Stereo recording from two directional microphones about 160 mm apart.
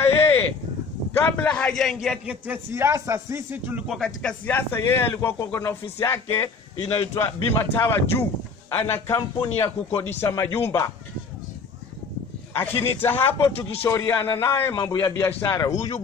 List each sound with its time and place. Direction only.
0.0 s a sound: 15° left (ahead or behind)
1.1 s a man's voice: 10° left (ahead or behind)
12.5 s a man's voice: 15° left (ahead or behind)